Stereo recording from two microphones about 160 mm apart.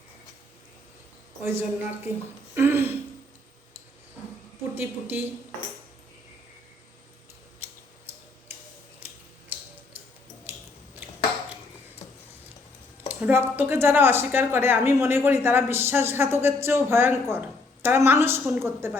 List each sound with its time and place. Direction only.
1.5 s a woman's voice: 15° right (ahead or behind)
4.7 s a woman's voice: 15° right (ahead or behind)
9.0 s tick-tock: 10° right (ahead or behind)
13.1 s a woman's voice: 10° right (ahead or behind)